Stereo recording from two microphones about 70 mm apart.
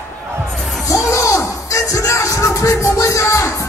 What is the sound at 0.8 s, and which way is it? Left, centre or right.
Music, left.